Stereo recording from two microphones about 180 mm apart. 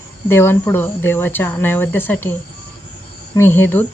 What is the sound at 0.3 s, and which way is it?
Speech, 15° left (ahead or behind).